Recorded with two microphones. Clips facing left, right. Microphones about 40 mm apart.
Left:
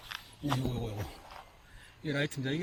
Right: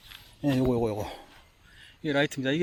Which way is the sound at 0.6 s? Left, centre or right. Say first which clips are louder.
Right 11 dB; right.